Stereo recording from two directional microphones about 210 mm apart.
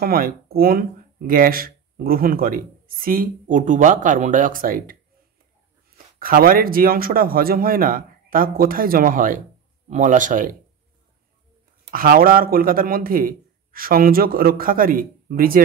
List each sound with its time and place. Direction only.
0.0 s speech: 45° right (ahead or behind)
6.1 s speech: 45° right (ahead or behind)
11.9 s speech: 45° right (ahead or behind)